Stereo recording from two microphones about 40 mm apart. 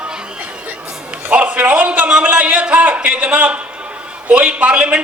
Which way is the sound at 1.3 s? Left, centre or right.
Right.